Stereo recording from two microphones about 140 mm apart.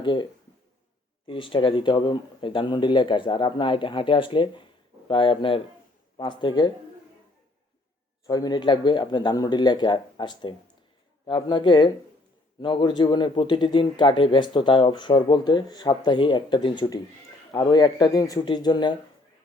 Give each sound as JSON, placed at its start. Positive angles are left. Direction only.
{"t": 0.0, "sound": "speech", "side_deg": 35}
{"t": 1.3, "sound": "a man's voice", "side_deg": 35}
{"t": 8.3, "sound": "a man's voice", "side_deg": 30}